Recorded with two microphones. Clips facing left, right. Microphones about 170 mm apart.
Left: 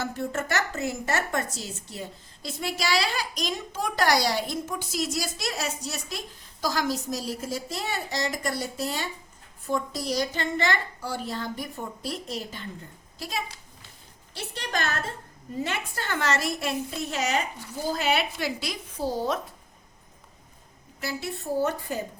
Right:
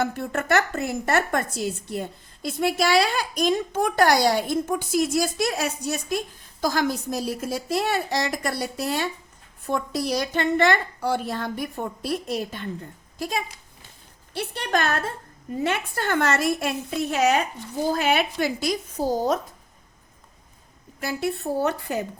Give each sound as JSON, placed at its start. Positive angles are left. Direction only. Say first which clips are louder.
{"t": 0.0, "sound": "a woman's voice", "louder": "right 4 dB", "side_deg": -60}
{"t": 21.0, "sound": "a woman's voice", "louder": "right 6 dB", "side_deg": -55}